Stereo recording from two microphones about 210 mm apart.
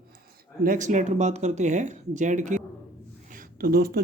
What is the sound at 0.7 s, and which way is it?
Speech, 35° right (ahead or behind).